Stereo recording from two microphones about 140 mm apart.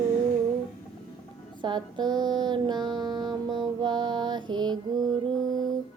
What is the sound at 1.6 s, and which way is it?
Child singing, 35° right (ahead or behind).